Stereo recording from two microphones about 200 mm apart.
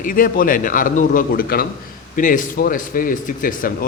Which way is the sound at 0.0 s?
45° left (ahead or behind).